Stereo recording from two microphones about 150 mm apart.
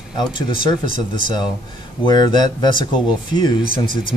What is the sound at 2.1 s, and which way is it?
Speech, 30° left (ahead or behind).